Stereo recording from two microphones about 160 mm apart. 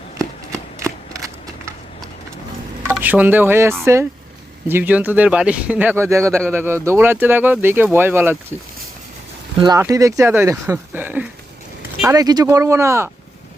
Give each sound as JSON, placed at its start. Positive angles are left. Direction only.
{"t": 0.5, "sound": "a sound", "side_deg": -20}
{"t": 3.0, "sound": "speech", "side_deg": -10}
{"t": 9.6, "sound": "speech", "side_deg": -20}
{"t": 12.0, "sound": "speech", "side_deg": -25}